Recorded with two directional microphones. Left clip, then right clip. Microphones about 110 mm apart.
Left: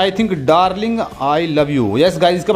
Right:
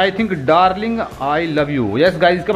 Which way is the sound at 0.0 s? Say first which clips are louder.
Left 1 dB; 50° left (ahead or behind).